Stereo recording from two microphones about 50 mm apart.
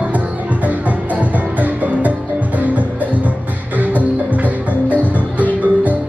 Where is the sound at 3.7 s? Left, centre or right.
Right.